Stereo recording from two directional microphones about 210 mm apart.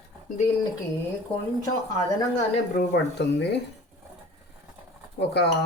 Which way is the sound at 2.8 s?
55° left (ahead or behind).